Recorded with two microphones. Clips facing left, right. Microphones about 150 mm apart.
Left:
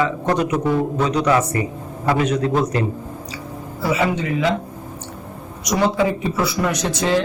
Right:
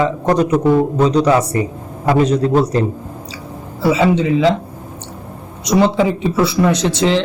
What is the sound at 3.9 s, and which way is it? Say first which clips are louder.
Speech: right 5 dB; 25° right (ahead or behind).